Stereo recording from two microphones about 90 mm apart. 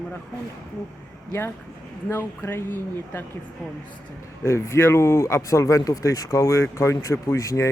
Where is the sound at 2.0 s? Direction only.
25° left (ahead or behind).